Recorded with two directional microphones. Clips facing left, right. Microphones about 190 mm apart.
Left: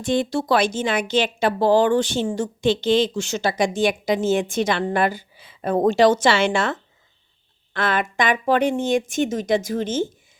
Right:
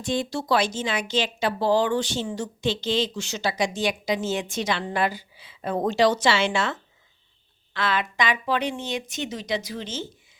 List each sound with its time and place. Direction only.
0.0 s speech: 55° left (ahead or behind)